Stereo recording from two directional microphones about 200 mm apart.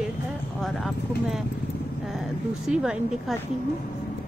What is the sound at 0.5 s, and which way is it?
Speech, 5° left (ahead or behind).